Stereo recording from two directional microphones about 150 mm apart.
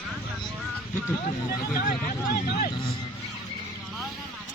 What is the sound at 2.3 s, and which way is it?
Speech, 90° left.